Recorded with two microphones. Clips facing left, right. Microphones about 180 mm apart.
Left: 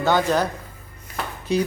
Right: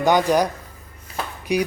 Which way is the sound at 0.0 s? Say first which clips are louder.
Right 2 dB; 15° right (ahead or behind).